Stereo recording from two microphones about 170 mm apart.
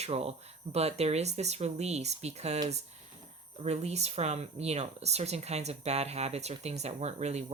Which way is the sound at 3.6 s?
40° right (ahead or behind).